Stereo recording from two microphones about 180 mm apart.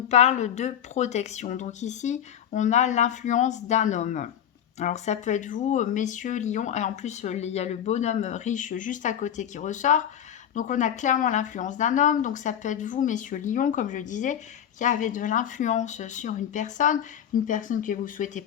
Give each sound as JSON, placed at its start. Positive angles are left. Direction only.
{"t": 0.1, "sound": "speech", "side_deg": 40}